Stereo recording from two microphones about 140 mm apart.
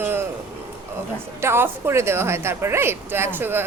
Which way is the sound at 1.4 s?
15° right (ahead or behind).